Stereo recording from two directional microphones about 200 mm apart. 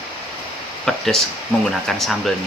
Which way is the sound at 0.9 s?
Centre (ahead or behind).